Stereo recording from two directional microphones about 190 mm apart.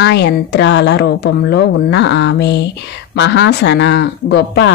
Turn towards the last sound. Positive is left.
turn(degrees=60)  # may be behind; listen again after turning